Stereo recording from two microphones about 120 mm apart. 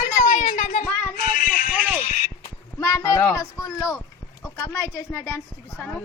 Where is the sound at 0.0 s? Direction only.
90° left.